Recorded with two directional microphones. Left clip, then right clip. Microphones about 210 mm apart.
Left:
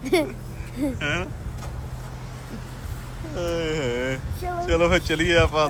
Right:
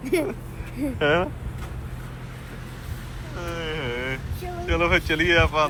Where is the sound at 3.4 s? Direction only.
20° left (ahead or behind).